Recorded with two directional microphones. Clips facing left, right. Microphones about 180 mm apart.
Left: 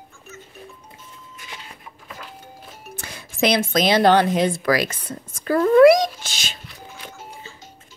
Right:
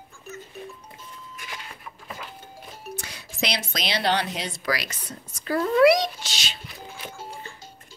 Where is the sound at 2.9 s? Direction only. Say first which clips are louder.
Even; 50° left (ahead or behind).